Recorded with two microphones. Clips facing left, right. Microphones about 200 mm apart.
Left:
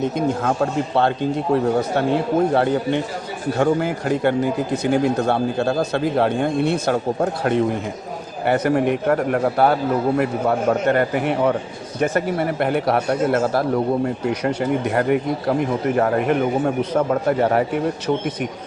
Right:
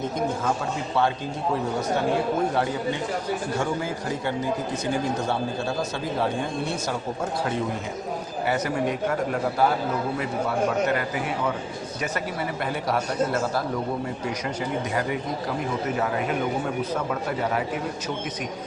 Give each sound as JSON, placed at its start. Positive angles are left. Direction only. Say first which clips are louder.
{"t": 0.4, "sound": "speech", "louder": "left 6 dB", "side_deg": 60}
{"t": 2.6, "sound": "a man's voice", "louder": "left 7 dB", "side_deg": 65}